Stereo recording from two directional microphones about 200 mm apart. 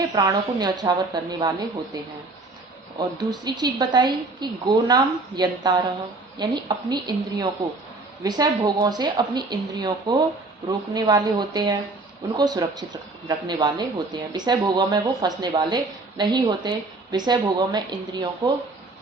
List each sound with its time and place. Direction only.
0.2 s a woman's voice: 20° right (ahead or behind)
3.0 s a woman's voice: 20° right (ahead or behind)